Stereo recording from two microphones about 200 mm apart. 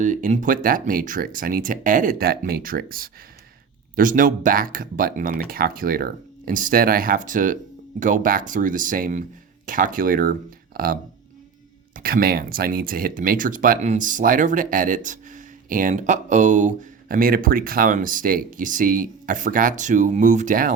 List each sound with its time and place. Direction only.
0.0 s speech: 40° right (ahead or behind)
11.9 s speech: 45° right (ahead or behind)